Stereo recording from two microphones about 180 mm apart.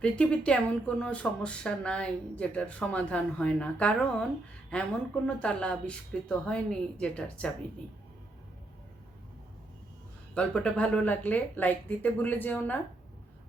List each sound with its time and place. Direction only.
0.0 s speech: 5° left (ahead or behind)
10.3 s speech: 5° left (ahead or behind)